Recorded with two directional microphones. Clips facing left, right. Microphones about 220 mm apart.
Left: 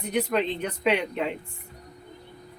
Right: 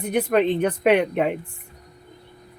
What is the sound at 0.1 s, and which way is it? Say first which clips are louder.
Speech: right 6 dB; 55° right (ahead or behind).